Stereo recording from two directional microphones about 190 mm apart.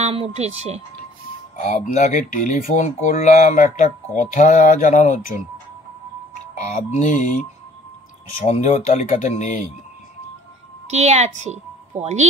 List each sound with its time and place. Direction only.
0.0 s speech: 30° right (ahead or behind)
1.6 s speech: 40° left (ahead or behind)
6.6 s speech: 40° left (ahead or behind)
8.5 s speech: 35° left (ahead or behind)
10.9 s a woman's voice: 35° right (ahead or behind)